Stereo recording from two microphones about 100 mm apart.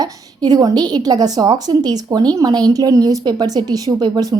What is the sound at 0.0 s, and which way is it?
A woman's voice, 40° right (ahead or behind).